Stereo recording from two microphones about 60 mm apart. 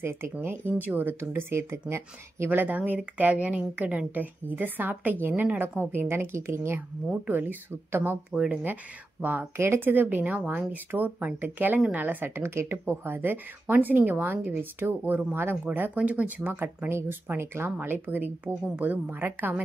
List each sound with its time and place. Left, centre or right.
0.0 s speech: right
2.5 s speech: right
7.2 s speech: right